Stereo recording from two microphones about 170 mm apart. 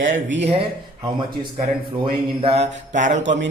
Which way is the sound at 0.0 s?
90° right.